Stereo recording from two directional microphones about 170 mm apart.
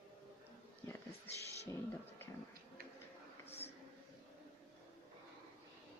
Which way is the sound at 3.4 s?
35° left (ahead or behind).